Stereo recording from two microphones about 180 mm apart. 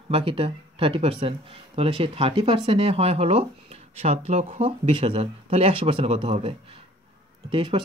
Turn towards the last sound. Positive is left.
turn(degrees=-30)  # may be behind; listen again after turning